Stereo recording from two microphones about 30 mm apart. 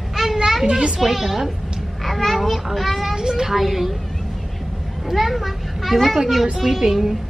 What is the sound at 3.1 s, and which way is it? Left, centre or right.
Speech, right.